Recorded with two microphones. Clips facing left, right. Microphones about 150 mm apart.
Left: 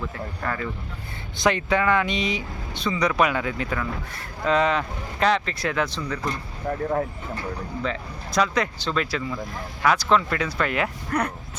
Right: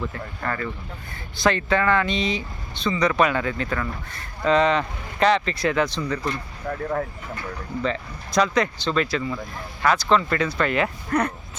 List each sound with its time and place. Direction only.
0.1 s speech: 5° left (ahead or behind)
6.6 s speech: 20° left (ahead or behind)
7.8 s speech: 5° left (ahead or behind)